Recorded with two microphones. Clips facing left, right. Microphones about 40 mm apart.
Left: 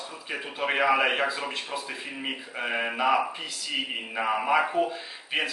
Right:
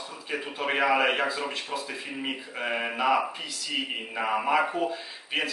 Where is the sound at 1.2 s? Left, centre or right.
Centre.